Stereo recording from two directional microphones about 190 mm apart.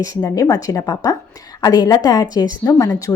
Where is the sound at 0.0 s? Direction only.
20° left (ahead or behind).